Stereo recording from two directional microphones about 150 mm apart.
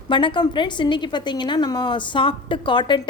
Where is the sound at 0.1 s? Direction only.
30° left (ahead or behind).